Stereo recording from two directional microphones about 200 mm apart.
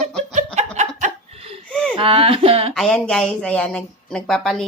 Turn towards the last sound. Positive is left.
turn(degrees=0)  # may be behind; listen again after turning